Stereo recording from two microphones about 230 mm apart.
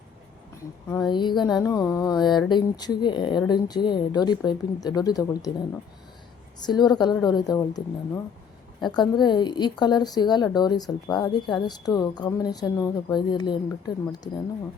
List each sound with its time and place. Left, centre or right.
0.9 s a woman's voice: centre
6.7 s a woman's voice: centre